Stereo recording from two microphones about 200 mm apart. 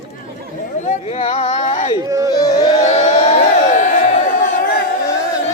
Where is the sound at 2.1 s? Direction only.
15° right (ahead or behind).